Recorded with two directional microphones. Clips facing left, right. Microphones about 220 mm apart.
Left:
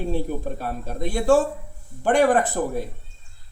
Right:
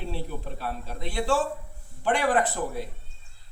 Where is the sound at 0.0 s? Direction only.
45° left (ahead or behind).